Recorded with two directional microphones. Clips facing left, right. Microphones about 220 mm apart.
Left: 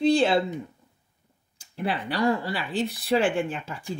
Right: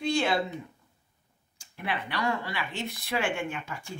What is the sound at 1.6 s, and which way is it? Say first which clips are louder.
Speech: left 5 dB; 35° left (ahead or behind).